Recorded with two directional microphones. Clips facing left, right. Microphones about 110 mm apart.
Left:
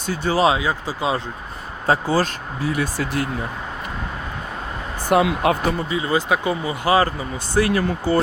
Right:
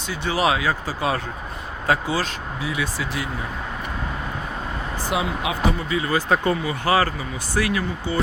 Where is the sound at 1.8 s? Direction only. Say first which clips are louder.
Left 4 dB; 35° left (ahead or behind).